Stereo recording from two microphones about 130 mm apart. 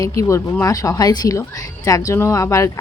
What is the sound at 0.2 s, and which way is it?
Speech, 25° left (ahead or behind).